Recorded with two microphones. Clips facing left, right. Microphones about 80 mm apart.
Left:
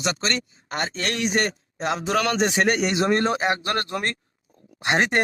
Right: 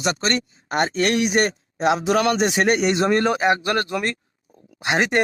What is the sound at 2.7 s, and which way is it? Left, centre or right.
Speech, right.